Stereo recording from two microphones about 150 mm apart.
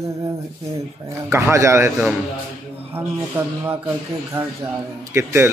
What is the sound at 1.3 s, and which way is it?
Speech, 20° right (ahead or behind).